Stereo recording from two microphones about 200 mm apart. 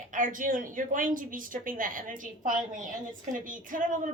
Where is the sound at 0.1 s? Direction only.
40° right (ahead or behind).